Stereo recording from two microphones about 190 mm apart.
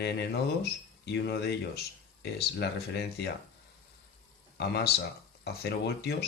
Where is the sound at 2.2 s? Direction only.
60° left (ahead or behind).